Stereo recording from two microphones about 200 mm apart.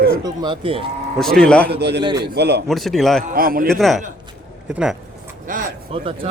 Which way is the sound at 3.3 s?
45° right (ahead or behind).